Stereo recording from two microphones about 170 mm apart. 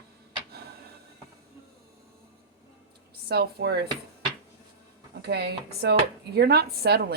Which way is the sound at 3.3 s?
70° right (ahead or behind).